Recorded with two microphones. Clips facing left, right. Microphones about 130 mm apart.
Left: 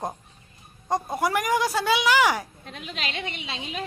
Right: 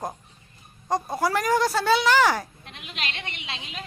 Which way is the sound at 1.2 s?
15° left (ahead or behind).